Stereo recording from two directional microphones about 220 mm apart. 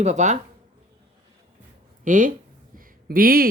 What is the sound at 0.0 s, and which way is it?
Speech, 30° right (ahead or behind).